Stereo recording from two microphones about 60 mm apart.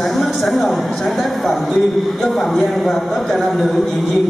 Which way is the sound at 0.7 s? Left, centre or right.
Centre.